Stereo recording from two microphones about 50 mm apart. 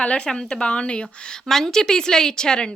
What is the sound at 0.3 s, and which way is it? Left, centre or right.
A woman's voice, centre.